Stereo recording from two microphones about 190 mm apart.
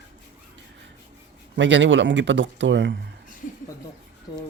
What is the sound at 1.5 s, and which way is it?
Speech, 75° right (ahead or behind).